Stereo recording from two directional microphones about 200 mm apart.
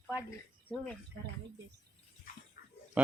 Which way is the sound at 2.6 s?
50° left (ahead or behind).